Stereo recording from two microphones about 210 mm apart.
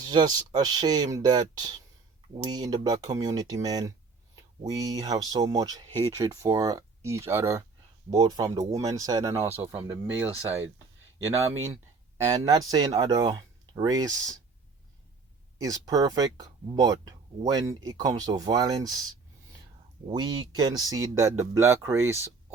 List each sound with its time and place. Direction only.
0.0 s speech: 20° right (ahead or behind)
12.1 s speech: 15° right (ahead or behind)
15.5 s speech: 15° right (ahead or behind)
20.1 s speech: 20° right (ahead or behind)